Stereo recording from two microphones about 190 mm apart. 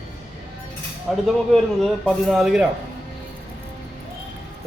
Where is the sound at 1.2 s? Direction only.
Centre (ahead or behind).